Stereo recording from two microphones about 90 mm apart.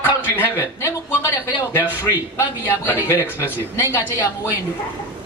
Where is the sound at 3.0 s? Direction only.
30° left (ahead or behind).